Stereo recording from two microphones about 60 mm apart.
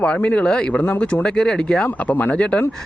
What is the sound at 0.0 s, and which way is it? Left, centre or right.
Speech, left.